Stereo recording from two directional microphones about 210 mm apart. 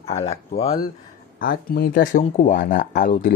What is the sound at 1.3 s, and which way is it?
Speech, 45° left (ahead or behind).